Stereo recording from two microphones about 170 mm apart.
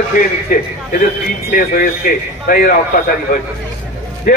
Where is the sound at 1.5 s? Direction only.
60° left (ahead or behind).